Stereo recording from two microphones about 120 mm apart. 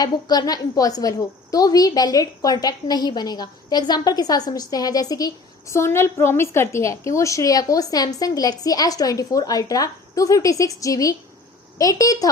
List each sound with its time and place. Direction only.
0.0 s a woman's voice: 35° left (ahead or behind)